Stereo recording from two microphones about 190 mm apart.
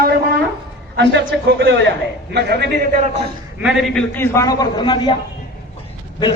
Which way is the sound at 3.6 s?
Centre (ahead or behind).